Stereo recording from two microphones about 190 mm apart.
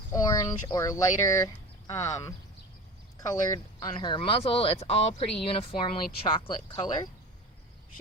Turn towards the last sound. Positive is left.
turn(degrees=20)  # may be behind; listen again after turning